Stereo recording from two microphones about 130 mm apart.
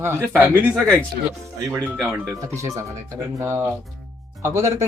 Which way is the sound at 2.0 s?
25° right (ahead or behind).